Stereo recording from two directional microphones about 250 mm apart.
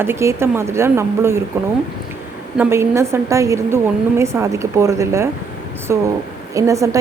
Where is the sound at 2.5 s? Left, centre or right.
Centre.